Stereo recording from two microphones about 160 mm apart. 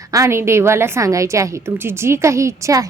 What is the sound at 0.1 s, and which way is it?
A woman's voice, 15° right (ahead or behind).